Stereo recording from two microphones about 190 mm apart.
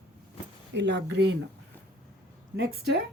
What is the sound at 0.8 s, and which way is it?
Speech, 65° right (ahead or behind).